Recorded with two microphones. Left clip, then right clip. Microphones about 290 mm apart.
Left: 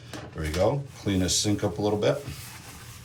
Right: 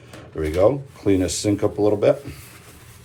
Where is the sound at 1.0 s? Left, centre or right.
Right.